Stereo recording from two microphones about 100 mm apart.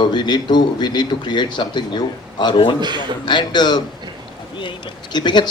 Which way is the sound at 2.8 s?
50° right (ahead or behind).